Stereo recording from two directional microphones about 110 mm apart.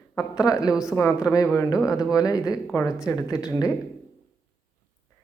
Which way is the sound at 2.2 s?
35° left (ahead or behind).